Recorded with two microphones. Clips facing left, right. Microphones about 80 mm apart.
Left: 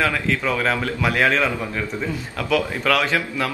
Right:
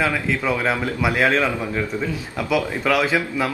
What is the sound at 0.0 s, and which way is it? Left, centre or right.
A man's voice, centre.